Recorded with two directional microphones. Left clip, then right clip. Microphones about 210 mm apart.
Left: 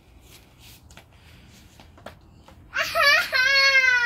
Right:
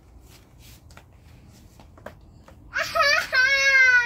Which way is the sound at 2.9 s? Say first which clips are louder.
Left 1 dB; 15° left (ahead or behind).